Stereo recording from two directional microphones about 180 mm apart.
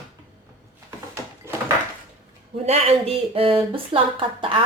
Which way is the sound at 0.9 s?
15° right (ahead or behind).